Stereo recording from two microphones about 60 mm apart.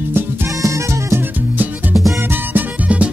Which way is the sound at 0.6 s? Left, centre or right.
Right.